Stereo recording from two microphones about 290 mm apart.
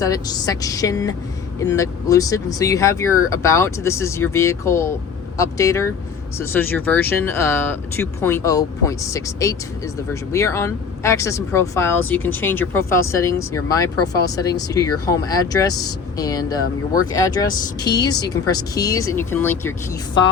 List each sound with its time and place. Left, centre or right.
0.0 s speech: centre